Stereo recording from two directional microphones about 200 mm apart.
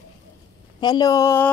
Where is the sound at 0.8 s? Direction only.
20° left (ahead or behind).